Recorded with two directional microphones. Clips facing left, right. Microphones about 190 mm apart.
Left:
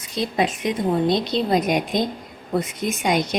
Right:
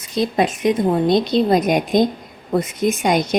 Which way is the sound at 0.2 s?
45° right (ahead or behind).